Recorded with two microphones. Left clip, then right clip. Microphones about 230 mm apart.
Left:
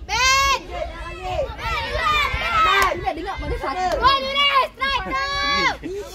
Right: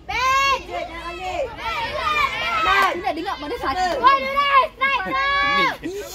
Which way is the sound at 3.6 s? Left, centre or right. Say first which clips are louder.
Right 1 dB; right.